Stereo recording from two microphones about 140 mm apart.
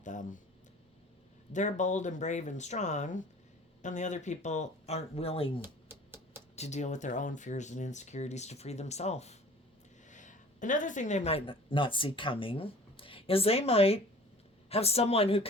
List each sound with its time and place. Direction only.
0.0 s speech: 65° left (ahead or behind)
1.5 s speech: 60° left (ahead or behind); by 5.6 s 45° left (ahead or behind)
5.6 s a sound: 15° right (ahead or behind)
6.6 s speech: 55° left (ahead or behind)
10.1 s speech: 65° left (ahead or behind); by 15.4 s 45° left (ahead or behind)